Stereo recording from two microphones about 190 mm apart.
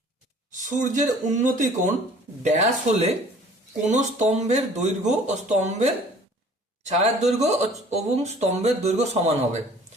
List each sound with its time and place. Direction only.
0.6 s speech: 40° right (ahead or behind)